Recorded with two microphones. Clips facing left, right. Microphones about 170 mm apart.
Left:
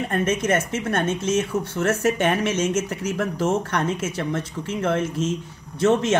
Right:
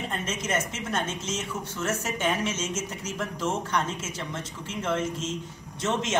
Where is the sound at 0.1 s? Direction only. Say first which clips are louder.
Left 10 dB; 55° left (ahead or behind).